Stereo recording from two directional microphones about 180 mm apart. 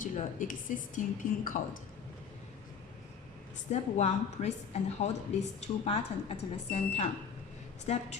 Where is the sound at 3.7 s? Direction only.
35° left (ahead or behind).